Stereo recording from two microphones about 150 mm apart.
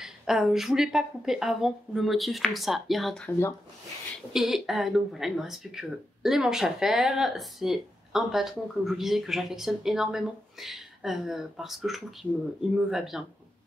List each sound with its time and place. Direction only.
0.0 s speech: 5° right (ahead or behind)
3.3 s speech: 15° left (ahead or behind)
4.3 s speech: 5° right (ahead or behind)